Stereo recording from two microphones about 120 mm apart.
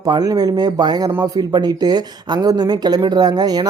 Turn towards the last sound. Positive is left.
turn(degrees=-35)  # may be behind; listen again after turning